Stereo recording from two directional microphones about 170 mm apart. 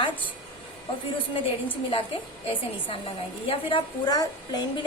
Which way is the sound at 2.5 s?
30° left (ahead or behind).